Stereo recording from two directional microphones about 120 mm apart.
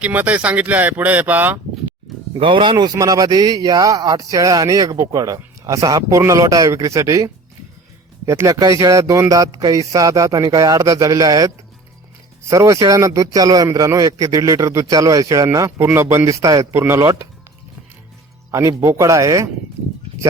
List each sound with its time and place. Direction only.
0.0 s speech: 10° right (ahead or behind)
2.4 s a man's voice: 45° right (ahead or behind); by 7.3 s 25° right (ahead or behind)
8.3 s speech: 25° right (ahead or behind)
18.5 s speech: 25° right (ahead or behind)